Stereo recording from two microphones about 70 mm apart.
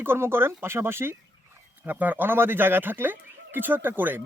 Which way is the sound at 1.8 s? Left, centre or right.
Right.